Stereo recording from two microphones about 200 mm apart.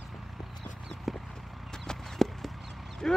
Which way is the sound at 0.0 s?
Centre (ahead or behind).